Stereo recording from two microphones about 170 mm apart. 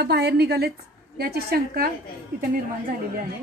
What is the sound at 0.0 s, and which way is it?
A woman's voice, 70° right (ahead or behind).